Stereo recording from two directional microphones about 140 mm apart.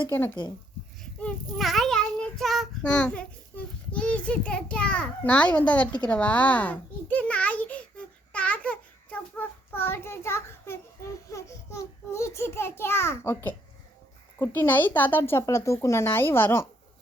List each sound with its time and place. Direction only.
1.2 s child singing: 5° left (ahead or behind)
5.5 s a woman's voice: 10° left (ahead or behind)
6.1 s a sound: 10° left (ahead or behind)
14.3 s a woman's voice: 15° left (ahead or behind)